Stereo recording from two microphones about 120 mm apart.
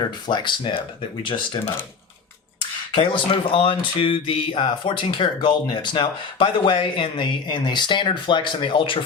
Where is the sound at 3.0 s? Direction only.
50° left (ahead or behind).